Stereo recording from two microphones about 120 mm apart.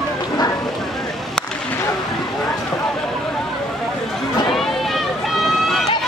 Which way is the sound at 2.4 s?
5° left (ahead or behind).